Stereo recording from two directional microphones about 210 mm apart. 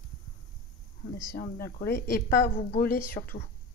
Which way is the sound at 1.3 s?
45° left (ahead or behind).